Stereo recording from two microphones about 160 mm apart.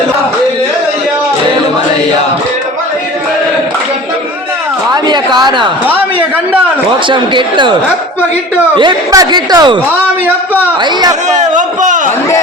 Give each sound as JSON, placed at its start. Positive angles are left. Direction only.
{"t": 5.0, "sound": "a sound", "side_deg": -25}
{"t": 7.1, "sound": "speech", "side_deg": -30}
{"t": 8.7, "sound": "speech", "side_deg": -30}
{"t": 11.3, "sound": "a man's voice", "side_deg": -50}